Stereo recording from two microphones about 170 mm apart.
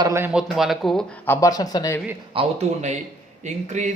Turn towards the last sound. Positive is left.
turn(degrees=-45)  # may be behind; listen again after turning